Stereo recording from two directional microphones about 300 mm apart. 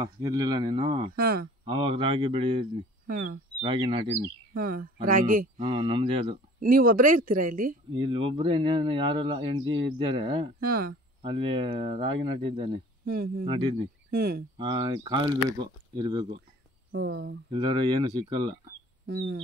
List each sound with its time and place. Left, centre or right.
0.0 s speech: centre
1.1 s speech: right
1.6 s speech: centre
5.0 s speech: right
5.7 s speech: centre
6.6 s speech: right
8.0 s speech: centre
10.6 s speech: right
11.2 s speech: centre
13.0 s speech: right
13.5 s speech: centre
16.9 s speech: right
17.5 s speech: centre
19.0 s speech: right